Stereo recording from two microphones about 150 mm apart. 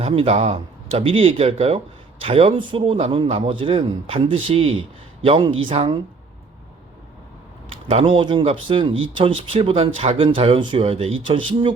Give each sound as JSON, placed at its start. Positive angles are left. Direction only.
{"t": 0.0, "sound": "speech", "side_deg": -40}
{"t": 7.7, "sound": "speech", "side_deg": -40}